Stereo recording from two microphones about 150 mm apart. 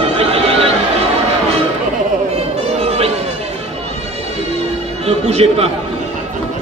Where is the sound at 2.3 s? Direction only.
45° right (ahead or behind).